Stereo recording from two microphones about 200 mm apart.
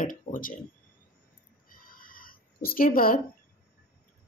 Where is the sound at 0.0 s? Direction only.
40° left (ahead or behind).